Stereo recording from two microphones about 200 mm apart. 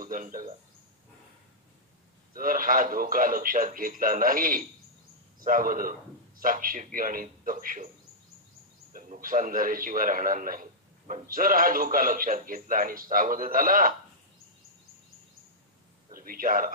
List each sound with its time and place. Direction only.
0.0 s a man's voice: 45° right (ahead or behind)
2.3 s a man's voice: 45° right (ahead or behind)
8.9 s a man's voice: 45° right (ahead or behind)
16.1 s speech: 45° right (ahead or behind)